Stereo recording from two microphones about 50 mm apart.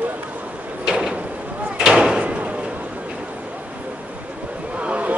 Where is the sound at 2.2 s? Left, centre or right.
Right.